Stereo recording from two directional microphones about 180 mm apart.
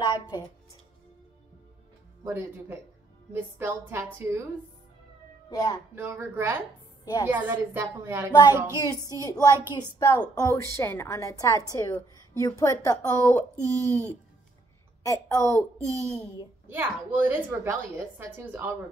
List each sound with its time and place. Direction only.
0.0 s music: 25° left (ahead or behind)
2.2 s a woman's voice: 15° right (ahead or behind)
5.5 s a child's voice: 20° left (ahead or behind)
5.9 s a woman's voice: 10° right (ahead or behind)
8.3 s a child's voice: 25° left (ahead or behind)
9.0 s a woman's voice: 20° right (ahead or behind)
9.3 s a child's voice: 20° left (ahead or behind)
13.6 s a woman's voice: 15° right (ahead or behind)
15.0 s speech: 15° left (ahead or behind)
15.8 s a woman's voice: 15° right (ahead or behind)